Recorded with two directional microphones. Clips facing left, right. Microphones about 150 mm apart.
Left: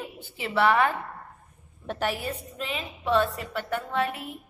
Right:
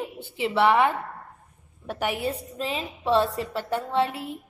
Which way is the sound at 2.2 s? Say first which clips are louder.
Right 4 dB; 35° right (ahead or behind).